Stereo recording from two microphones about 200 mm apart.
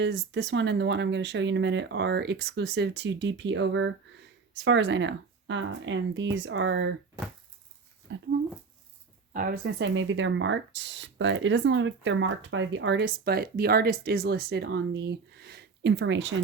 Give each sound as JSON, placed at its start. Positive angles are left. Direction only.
{"t": 0.0, "sound": "speech", "side_deg": -60}
{"t": 8.1, "sound": "speech", "side_deg": -65}
{"t": 9.3, "sound": "speech", "side_deg": -45}
{"t": 9.7, "sound": "speech", "side_deg": -65}